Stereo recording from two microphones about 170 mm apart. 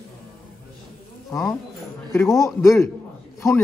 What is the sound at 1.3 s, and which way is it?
Speech, 20° left (ahead or behind).